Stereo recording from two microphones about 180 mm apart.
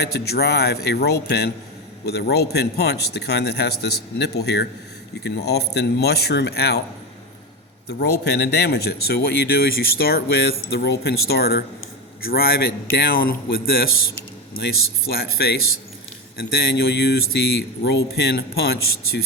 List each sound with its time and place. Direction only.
0.0 s speech: 65° left (ahead or behind)
7.9 s speech: 65° left (ahead or behind)